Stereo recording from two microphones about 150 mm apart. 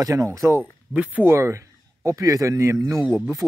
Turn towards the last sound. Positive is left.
turn(degrees=-15)  # may be behind; listen again after turning